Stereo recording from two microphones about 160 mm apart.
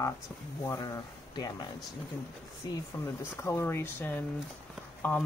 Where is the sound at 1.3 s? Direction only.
25° left (ahead or behind).